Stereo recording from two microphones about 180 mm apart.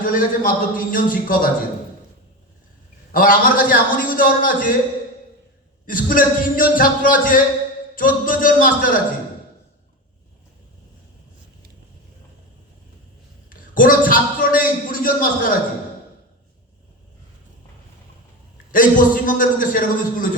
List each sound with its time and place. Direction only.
0.0 s a man's voice: 50° left (ahead or behind)
3.1 s a man's voice: 50° left (ahead or behind)
5.8 s a man's voice: 50° left (ahead or behind)
13.7 s a man's voice: 50° left (ahead or behind)
18.7 s a man's voice: 50° left (ahead or behind)